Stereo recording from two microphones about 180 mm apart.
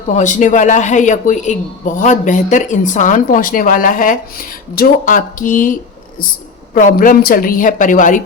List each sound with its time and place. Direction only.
0.1 s a woman's voice: 45° left (ahead or behind)
6.7 s a woman's voice: 50° left (ahead or behind)